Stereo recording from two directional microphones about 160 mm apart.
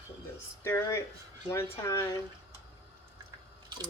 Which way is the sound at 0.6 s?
15° left (ahead or behind).